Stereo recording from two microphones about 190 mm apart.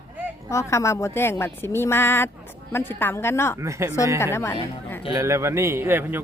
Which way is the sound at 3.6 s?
15° right (ahead or behind).